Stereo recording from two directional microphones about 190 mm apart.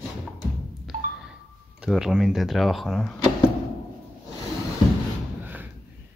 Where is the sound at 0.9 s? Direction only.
45° right (ahead or behind).